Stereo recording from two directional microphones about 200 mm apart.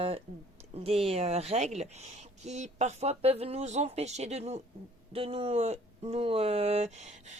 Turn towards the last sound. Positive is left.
turn(degrees=-35)  # may be behind; listen again after turning